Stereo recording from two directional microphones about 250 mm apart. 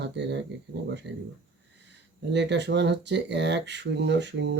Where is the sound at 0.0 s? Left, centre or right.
Right.